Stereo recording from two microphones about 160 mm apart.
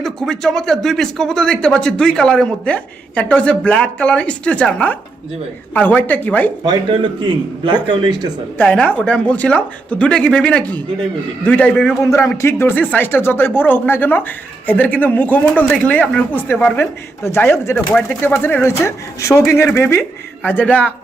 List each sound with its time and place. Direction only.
0.0 s speech: 5° left (ahead or behind)
7.9 s speech: 25° right (ahead or behind)
8.5 s speech: 5° left (ahead or behind)
12.0 s speech: 20° left (ahead or behind)